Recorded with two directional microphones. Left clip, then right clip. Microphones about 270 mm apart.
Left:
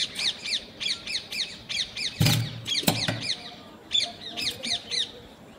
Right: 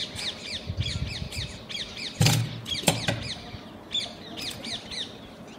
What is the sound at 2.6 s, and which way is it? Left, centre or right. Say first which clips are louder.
Rodents: left 1 dB; left.